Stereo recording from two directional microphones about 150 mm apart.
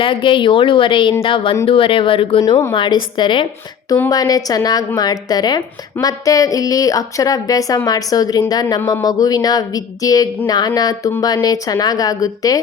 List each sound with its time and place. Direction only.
0.0 s a woman's voice: 35° left (ahead or behind)
2.4 s a woman's voice: 25° left (ahead or behind)
3.8 s a woman's voice: 20° left (ahead or behind)